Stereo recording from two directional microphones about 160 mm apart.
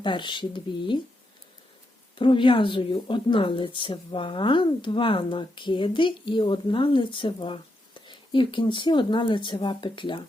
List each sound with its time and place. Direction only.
0.0 s speech: 30° left (ahead or behind)
2.1 s speech: 30° left (ahead or behind)